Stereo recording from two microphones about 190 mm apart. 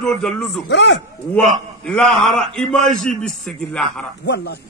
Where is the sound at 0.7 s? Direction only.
70° left (ahead or behind).